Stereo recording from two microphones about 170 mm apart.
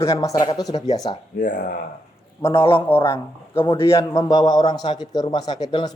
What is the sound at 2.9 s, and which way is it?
A man's voice, 10° left (ahead or behind).